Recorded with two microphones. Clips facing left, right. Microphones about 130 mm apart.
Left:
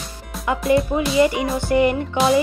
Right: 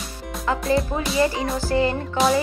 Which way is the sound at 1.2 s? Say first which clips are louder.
Left 4 dB; 15° left (ahead or behind).